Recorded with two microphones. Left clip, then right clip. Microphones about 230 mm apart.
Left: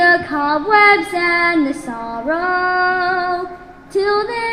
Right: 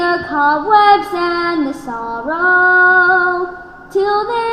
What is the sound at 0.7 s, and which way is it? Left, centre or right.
Child singing, centre.